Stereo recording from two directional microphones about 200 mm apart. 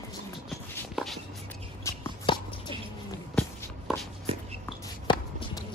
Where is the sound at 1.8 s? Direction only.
20° left (ahead or behind).